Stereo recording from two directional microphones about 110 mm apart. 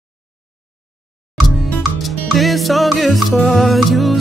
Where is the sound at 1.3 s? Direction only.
Centre (ahead or behind).